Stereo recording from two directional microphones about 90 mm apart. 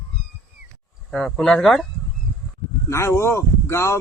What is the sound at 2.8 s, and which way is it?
Speech, 30° left (ahead or behind).